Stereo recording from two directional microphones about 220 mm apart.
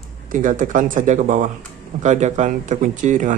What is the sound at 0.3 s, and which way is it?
Speech, 35° right (ahead or behind).